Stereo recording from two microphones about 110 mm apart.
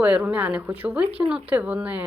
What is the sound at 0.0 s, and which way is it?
Speech, 15° right (ahead or behind).